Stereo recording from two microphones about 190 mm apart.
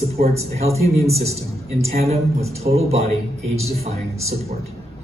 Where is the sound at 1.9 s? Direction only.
35° right (ahead or behind).